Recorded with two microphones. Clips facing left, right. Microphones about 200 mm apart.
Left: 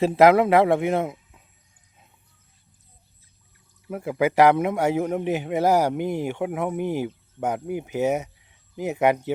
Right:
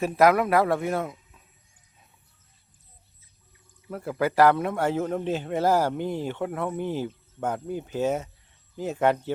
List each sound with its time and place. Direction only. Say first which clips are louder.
0.0 s speech: left 4 dB; 25° left (ahead or behind)
3.8 s a man's voice: left 4 dB; 15° left (ahead or behind)